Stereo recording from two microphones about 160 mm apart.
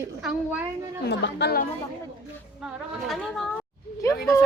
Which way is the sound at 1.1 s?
90° left.